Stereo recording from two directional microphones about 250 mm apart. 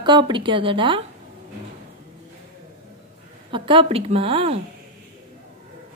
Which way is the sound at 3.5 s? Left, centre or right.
Right.